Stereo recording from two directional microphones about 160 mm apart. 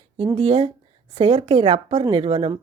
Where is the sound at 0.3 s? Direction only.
40° right (ahead or behind).